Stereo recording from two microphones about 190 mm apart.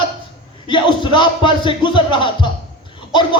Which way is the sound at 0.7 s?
25° left (ahead or behind).